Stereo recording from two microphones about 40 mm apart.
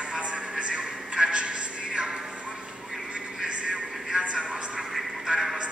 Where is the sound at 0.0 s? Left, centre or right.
Right.